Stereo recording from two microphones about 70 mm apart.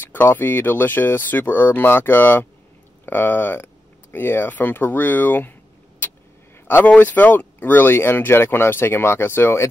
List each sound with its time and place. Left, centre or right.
0.0 s speech: left
6.7 s speech: left